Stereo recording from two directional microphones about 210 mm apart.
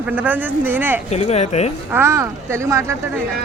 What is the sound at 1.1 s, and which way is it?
Speech, 30° left (ahead or behind).